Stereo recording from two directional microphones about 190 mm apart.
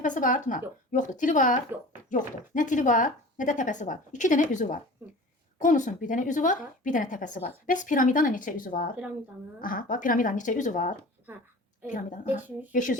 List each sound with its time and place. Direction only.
0.0 s a woman's voice: 45° left (ahead or behind)